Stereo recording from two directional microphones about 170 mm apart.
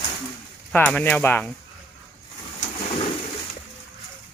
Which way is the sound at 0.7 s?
10° left (ahead or behind).